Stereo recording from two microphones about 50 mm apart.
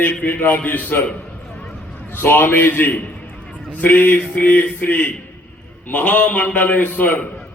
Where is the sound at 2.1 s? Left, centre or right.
Left.